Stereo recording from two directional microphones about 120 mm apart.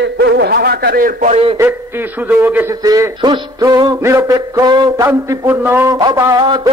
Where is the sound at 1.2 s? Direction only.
75° right (ahead or behind).